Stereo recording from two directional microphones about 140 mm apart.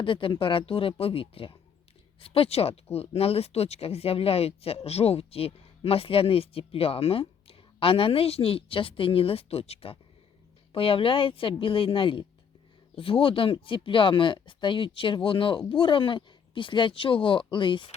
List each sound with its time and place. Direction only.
0.0 s speech: 40° left (ahead or behind)